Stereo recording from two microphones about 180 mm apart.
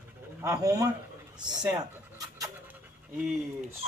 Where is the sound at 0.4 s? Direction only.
20° right (ahead or behind).